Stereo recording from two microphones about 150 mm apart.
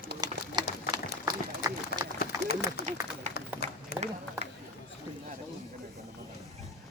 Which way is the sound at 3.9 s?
90° left.